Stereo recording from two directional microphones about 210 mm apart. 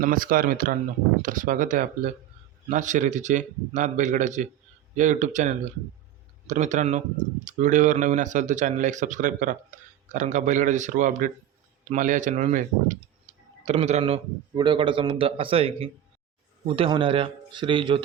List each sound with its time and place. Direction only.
0.0 s speech: 40° right (ahead or behind)
13.3 s clicking: 30° right (ahead or behind)
13.7 s a man's voice: 30° right (ahead or behind)